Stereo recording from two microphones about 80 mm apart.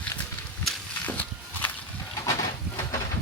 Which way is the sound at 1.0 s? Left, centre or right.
Centre.